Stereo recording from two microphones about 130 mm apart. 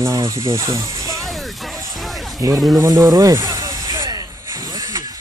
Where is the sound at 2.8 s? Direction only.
25° right (ahead or behind).